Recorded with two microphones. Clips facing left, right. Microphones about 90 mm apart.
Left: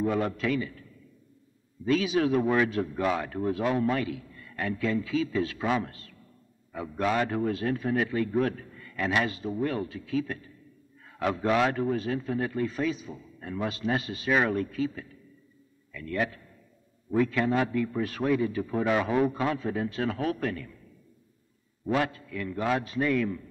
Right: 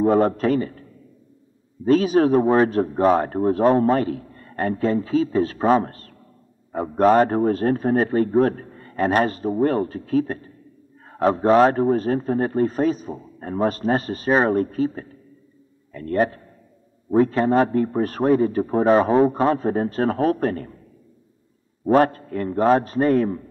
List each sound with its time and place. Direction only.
0.0 s a man's voice: 40° right (ahead or behind)
1.9 s a man's voice: 40° right (ahead or behind)
21.8 s a man's voice: 45° right (ahead or behind)